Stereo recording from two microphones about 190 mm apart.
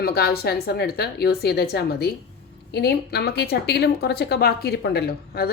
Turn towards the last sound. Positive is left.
turn(degrees=60)  # may be behind; listen again after turning